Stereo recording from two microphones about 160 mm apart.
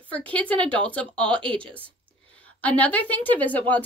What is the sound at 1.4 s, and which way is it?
Speech, 30° right (ahead or behind).